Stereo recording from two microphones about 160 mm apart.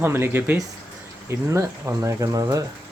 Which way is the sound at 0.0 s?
15° right (ahead or behind).